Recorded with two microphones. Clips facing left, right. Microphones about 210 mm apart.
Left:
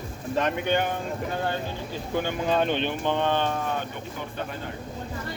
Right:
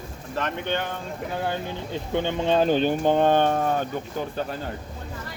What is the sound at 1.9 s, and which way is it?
Speech, 25° right (ahead or behind).